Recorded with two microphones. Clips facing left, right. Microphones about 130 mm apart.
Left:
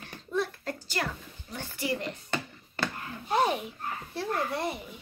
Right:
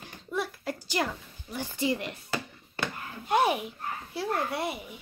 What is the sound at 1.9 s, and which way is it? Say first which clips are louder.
A child's voice: left 1 dB; 5° right (ahead or behind).